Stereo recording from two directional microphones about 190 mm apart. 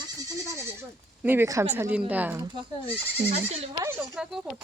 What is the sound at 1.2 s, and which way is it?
Speech, 10° right (ahead or behind).